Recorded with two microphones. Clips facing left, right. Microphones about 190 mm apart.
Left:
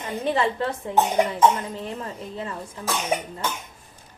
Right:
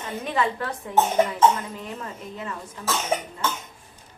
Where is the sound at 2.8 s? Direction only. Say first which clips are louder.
Even; 15° left (ahead or behind).